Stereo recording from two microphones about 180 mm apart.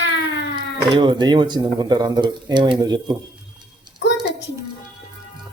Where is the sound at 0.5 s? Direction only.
25° right (ahead or behind).